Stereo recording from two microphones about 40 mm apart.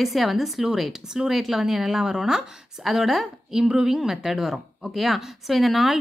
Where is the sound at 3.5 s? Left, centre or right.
Centre.